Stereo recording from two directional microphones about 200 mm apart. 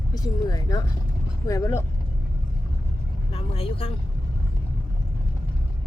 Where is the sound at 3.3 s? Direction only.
30° left (ahead or behind).